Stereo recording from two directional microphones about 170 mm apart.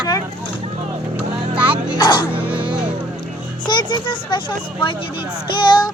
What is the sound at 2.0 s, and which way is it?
Speech, 25° left (ahead or behind).